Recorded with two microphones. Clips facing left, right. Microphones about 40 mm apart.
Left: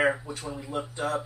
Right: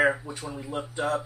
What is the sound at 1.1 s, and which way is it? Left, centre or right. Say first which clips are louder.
Speech: right 2 dB; right.